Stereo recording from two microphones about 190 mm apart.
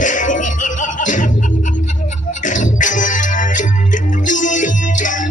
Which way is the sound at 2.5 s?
40° left (ahead or behind).